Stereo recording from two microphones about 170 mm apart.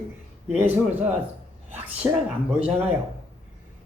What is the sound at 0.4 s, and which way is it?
Speech, 10° right (ahead or behind).